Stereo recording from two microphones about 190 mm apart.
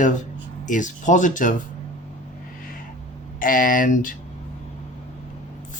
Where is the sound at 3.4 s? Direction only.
45° left (ahead or behind).